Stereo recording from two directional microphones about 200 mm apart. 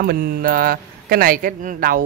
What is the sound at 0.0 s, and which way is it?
A man's voice, 50° right (ahead or behind).